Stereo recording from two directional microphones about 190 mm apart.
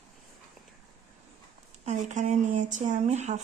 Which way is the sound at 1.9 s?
40° right (ahead or behind).